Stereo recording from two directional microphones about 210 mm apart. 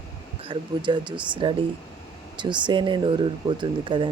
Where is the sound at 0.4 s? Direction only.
25° right (ahead or behind).